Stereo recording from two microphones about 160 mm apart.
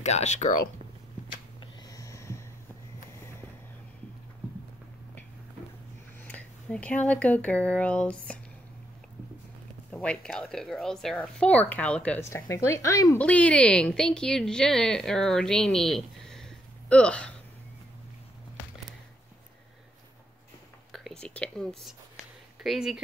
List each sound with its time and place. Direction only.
0.0 s speech: 45° left (ahead or behind)
1.6 s a sound: 20° left (ahead or behind)
6.2 s a sound: 10° left (ahead or behind)
7.1 s speech: 10° left (ahead or behind)
9.8 s speech: 5° left (ahead or behind)
13.2 s a woman's voice: 10° left (ahead or behind)
20.9 s speech: 5° left (ahead or behind)